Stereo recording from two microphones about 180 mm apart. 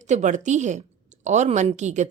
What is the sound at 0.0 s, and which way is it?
A woman's voice, 40° right (ahead or behind).